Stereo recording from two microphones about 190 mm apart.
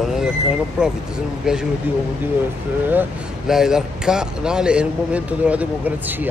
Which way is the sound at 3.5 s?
5° right (ahead or behind).